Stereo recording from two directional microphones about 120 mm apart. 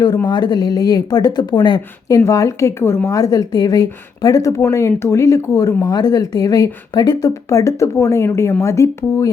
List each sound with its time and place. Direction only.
0.3 s a woman's voice: 35° left (ahead or behind)